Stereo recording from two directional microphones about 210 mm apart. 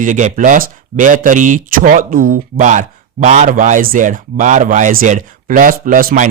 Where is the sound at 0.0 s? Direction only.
35° right (ahead or behind).